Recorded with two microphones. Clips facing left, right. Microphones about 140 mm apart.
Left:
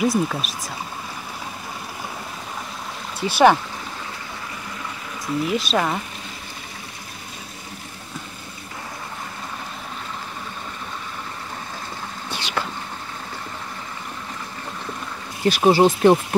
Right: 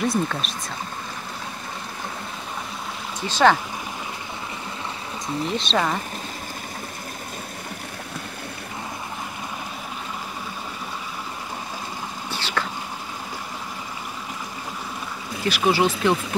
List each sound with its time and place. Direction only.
0.0 s speech: 5° left (ahead or behind)
3.2 s speech: 10° left (ahead or behind)
5.5 s speech: 5° left (ahead or behind)
12.3 s vehicle: 15° left (ahead or behind)
15.4 s speech: 40° left (ahead or behind)